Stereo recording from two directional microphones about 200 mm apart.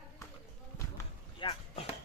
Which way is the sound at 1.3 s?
30° left (ahead or behind).